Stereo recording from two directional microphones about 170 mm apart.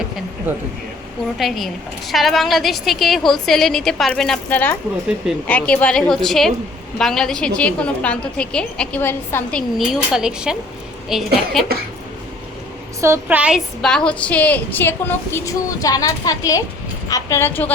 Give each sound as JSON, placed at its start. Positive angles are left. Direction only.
{"t": 0.5, "sound": "a woman's voice", "side_deg": -10}
{"t": 1.4, "sound": "a woman's voice", "side_deg": 0}
{"t": 13.0, "sound": "a woman's voice", "side_deg": -15}
{"t": 13.8, "sound": "speech", "side_deg": 5}